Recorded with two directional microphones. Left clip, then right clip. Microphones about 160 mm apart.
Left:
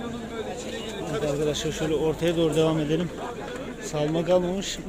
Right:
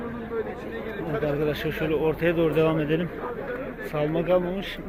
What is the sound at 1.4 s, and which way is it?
Speech, 20° left (ahead or behind).